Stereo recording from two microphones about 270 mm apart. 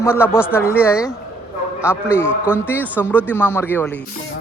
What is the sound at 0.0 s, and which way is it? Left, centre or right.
Speech, centre.